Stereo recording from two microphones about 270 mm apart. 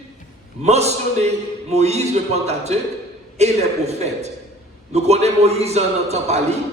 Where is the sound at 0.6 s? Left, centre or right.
Right.